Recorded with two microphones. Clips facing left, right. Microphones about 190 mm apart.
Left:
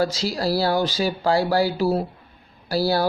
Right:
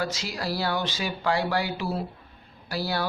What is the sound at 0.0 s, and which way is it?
Speech, 35° left (ahead or behind).